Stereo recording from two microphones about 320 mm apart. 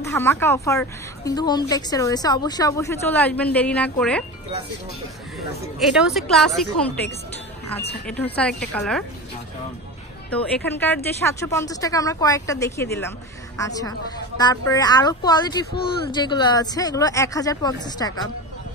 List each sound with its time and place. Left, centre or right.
0.0 s a woman's voice: centre
5.8 s a woman's voice: centre
10.3 s a woman's voice: centre